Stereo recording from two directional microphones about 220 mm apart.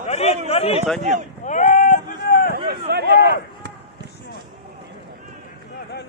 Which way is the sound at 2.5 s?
45° right (ahead or behind).